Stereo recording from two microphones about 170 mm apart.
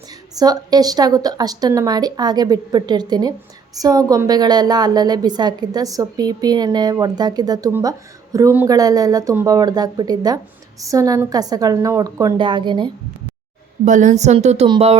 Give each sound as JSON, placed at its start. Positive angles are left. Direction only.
{"t": 0.3, "sound": "a woman's voice", "side_deg": -20}
{"t": 13.8, "sound": "speech", "side_deg": -45}